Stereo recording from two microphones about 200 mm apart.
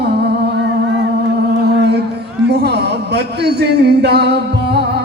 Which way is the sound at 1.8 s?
55° right (ahead or behind).